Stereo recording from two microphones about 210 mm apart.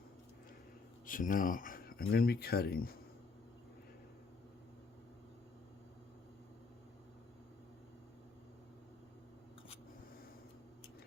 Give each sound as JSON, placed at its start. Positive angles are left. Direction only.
{"t": 1.0, "sound": "speech", "side_deg": 40}